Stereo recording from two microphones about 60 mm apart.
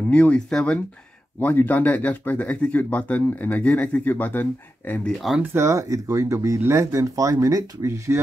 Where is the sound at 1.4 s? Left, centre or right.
Left.